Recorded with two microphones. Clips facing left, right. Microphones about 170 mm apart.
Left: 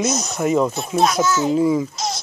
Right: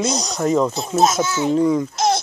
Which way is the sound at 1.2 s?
40° left (ahead or behind).